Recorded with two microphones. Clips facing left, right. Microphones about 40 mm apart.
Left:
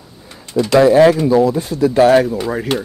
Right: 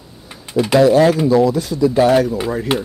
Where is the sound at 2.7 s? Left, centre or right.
Right.